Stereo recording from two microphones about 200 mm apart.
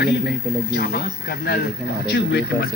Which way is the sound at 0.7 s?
50° left (ahead or behind).